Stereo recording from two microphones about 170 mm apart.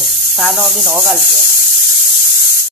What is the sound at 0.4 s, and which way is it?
Speech, centre (ahead or behind).